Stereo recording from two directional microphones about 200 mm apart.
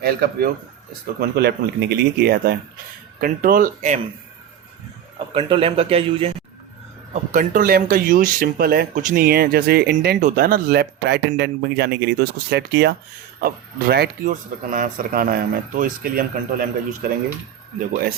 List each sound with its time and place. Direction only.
0.0 s speech: 50° right (ahead or behind)
5.3 s a man's voice: 25° right (ahead or behind)
7.1 s speech: 40° right (ahead or behind)